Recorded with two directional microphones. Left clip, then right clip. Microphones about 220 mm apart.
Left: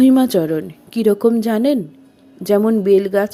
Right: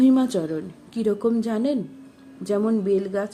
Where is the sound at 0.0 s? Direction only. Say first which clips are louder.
Left 7 dB; 30° left (ahead or behind).